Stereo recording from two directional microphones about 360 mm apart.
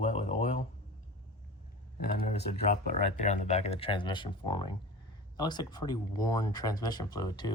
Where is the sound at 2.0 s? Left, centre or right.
Left.